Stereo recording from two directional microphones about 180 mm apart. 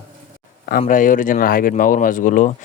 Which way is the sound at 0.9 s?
45° left (ahead or behind).